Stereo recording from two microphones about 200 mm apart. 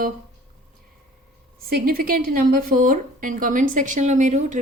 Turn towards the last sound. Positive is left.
turn(degrees=-35)  # may be behind; listen again after turning